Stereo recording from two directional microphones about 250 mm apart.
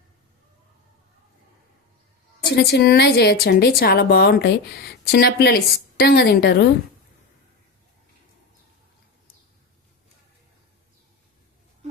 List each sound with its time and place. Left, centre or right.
2.4 s a woman's voice: left